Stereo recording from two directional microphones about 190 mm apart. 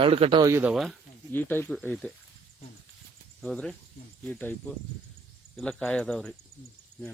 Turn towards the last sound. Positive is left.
turn(degrees=5)  # may be behind; listen again after turning